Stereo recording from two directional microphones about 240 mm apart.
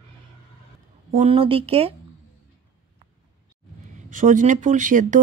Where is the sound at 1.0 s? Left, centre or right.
Right.